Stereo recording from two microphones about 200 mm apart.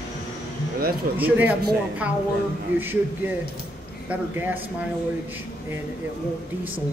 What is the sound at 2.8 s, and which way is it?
Speech, 10° right (ahead or behind).